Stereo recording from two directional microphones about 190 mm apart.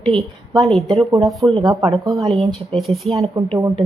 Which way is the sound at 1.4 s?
25° right (ahead or behind).